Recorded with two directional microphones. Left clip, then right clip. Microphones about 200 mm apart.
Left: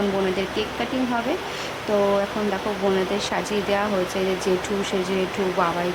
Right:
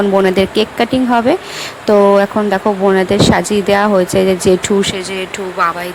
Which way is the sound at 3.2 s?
40° right (ahead or behind).